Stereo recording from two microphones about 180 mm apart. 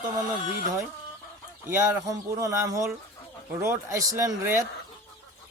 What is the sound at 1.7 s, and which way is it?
Speech, 15° right (ahead or behind).